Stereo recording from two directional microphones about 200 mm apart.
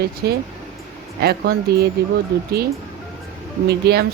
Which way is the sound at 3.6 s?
55° right (ahead or behind).